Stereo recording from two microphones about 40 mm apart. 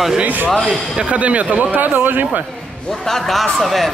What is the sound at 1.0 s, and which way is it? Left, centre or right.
A man's voice, right.